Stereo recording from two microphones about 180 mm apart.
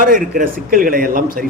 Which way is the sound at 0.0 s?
50° right (ahead or behind).